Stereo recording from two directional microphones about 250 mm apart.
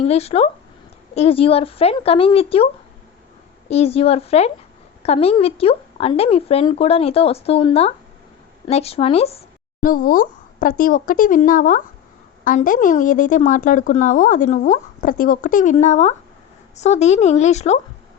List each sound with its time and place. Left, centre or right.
0.0 s speech: left
3.7 s speech: left
9.8 s a woman's voice: left